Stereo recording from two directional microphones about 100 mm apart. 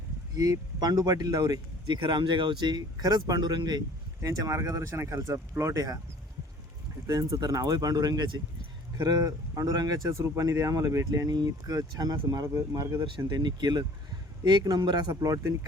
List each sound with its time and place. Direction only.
0.3 s speech: 40° right (ahead or behind)
7.1 s speech: 35° right (ahead or behind)
10.2 s speech: 30° right (ahead or behind)
13.1 s speech: 50° right (ahead or behind)